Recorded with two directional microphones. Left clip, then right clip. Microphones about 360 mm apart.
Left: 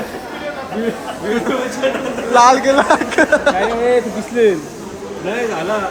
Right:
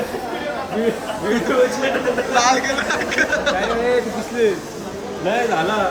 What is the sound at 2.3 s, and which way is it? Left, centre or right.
Speech, centre.